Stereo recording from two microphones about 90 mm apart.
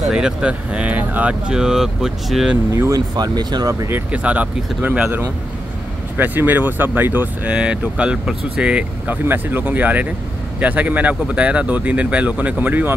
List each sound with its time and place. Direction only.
0.1 s speech: 10° right (ahead or behind)
2.7 s speech: 40° right (ahead or behind)
3.9 s speech: 15° right (ahead or behind)